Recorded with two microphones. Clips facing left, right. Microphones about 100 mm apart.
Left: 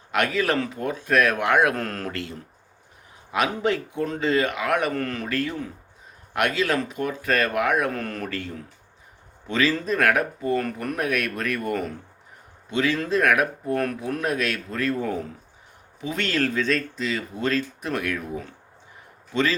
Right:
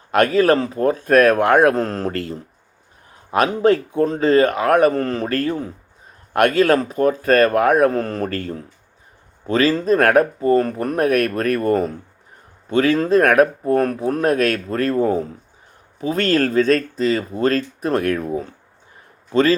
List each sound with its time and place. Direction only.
0.1 s speech: 40° right (ahead or behind)
1.7 s speech: 30° right (ahead or behind)
3.3 s speech: 40° right (ahead or behind)
6.3 s speech: 50° right (ahead or behind)
12.7 s a man's voice: 45° right (ahead or behind)